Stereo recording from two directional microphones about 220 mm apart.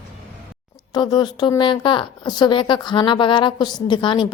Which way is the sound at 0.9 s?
20° left (ahead or behind).